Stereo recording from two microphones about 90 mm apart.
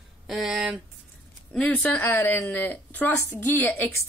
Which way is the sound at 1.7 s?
15° left (ahead or behind).